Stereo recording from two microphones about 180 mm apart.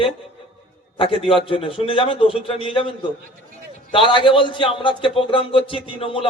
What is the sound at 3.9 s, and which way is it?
A man's voice, 30° left (ahead or behind).